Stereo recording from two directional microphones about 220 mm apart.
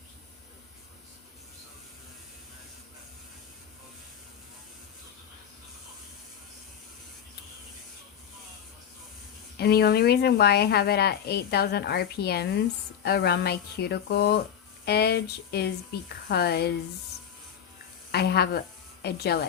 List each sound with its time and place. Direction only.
9.6 s a woman's voice: 45° left (ahead or behind)
18.1 s a woman's voice: 45° left (ahead or behind)